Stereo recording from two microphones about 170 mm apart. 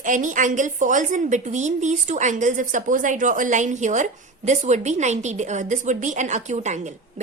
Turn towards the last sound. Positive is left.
turn(degrees=-45)  # may be behind; listen again after turning